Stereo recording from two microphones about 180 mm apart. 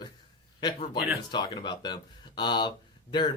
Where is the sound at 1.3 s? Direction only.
25° left (ahead or behind).